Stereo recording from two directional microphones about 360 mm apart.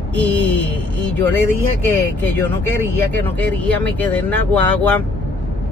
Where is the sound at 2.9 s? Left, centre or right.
Centre.